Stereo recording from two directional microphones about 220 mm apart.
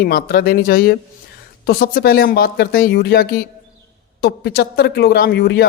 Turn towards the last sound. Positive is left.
turn(degrees=50)  # may be behind; listen again after turning